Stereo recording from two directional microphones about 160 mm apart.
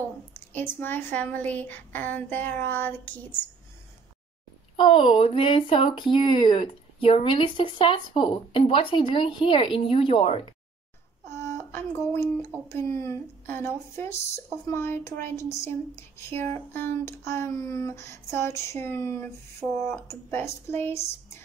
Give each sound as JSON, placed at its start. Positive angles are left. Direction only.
{"t": 0.3, "sound": "speech", "side_deg": 10}
{"t": 4.7, "sound": "speech", "side_deg": 30}
{"t": 11.2, "sound": "speech", "side_deg": 15}